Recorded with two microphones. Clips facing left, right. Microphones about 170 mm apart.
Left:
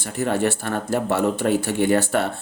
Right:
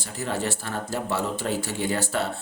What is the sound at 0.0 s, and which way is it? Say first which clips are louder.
Speech: left 7 dB; 55° left (ahead or behind).